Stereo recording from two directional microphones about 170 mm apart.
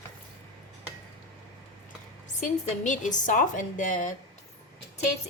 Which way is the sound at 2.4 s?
45° left (ahead or behind).